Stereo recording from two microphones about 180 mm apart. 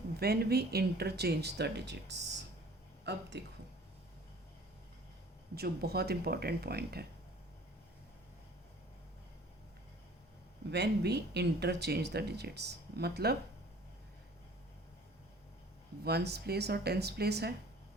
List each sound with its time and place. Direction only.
0.2 s speech: 60° right (ahead or behind)
5.5 s speech: 60° right (ahead or behind)
10.7 s speech: 70° right (ahead or behind)
16.0 s speech: 65° right (ahead or behind)